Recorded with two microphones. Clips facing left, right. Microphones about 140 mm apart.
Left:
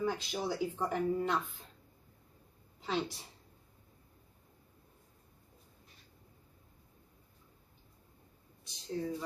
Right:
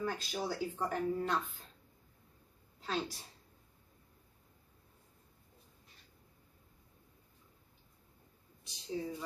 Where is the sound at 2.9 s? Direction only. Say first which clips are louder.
Left 2 dB; 15° left (ahead or behind).